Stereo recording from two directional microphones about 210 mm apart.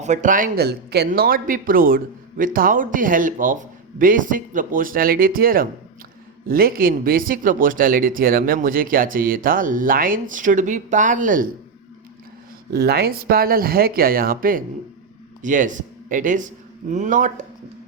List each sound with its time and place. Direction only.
0.0 s speech: 35° right (ahead or behind)
12.7 s speech: 50° right (ahead or behind)